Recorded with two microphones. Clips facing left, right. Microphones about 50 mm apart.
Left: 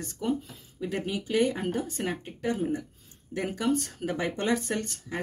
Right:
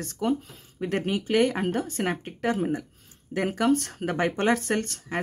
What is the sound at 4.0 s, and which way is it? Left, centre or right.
Speech, right.